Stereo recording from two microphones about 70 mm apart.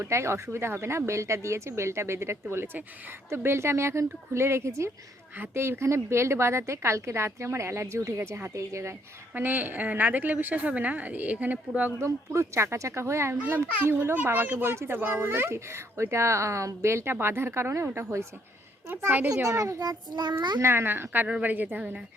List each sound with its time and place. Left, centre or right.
0.0 s a child's voice: right
9.3 s speech: right
11.9 s speech: right
13.8 s speech: right
19.3 s a child's voice: right
19.8 s a child's voice: right
20.6 s speech: right
21.2 s speech: centre